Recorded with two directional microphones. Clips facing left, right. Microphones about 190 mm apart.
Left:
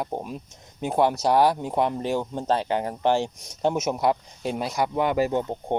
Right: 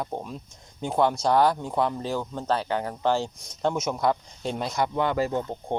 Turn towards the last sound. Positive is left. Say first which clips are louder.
# left 3 dB
turn(degrees=20)  # may be behind; listen again after turning